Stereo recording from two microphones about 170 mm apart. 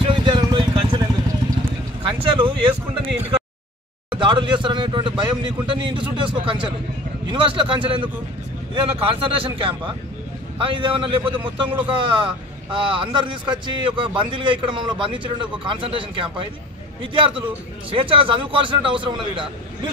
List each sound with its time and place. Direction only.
0.0 s vehicle: 30° right (ahead or behind)
2.2 s a sound: 30° right (ahead or behind)
4.1 s speech: 30° right (ahead or behind)